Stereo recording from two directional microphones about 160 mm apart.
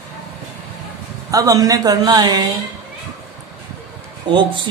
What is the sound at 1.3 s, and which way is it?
A man's voice, 20° right (ahead or behind).